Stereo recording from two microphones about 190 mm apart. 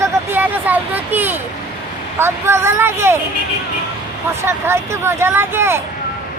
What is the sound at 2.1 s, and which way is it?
Speech, 15° right (ahead or behind).